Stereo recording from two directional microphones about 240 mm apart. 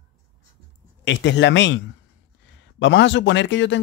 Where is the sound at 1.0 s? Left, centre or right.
Left.